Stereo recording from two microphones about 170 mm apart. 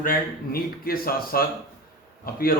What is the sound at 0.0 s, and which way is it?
A man's voice, 60° left (ahead or behind).